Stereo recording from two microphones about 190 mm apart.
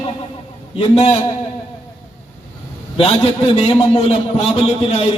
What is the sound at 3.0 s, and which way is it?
A man's voice, 30° left (ahead or behind).